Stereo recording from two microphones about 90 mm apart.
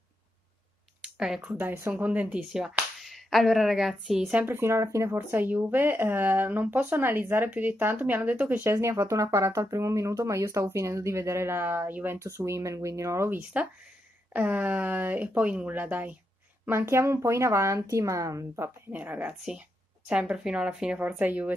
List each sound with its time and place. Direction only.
1.0 s a sound: 5° right (ahead or behind)
1.5 s speech: 25° right (ahead or behind); by 4.3 s centre (ahead or behind)
4.3 s speech: 15° right (ahead or behind)
4.6 s speech: 30° right (ahead or behind)
8.7 s speech: 35° right (ahead or behind)
13.4 s speech: 15° right (ahead or behind); by 18.7 s 35° right (ahead or behind)
18.9 s speech: 20° right (ahead or behind)